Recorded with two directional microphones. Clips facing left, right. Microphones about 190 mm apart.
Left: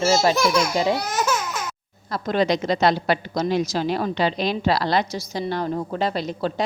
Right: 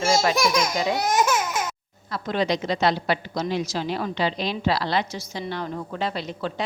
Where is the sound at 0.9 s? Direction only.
20° right (ahead or behind).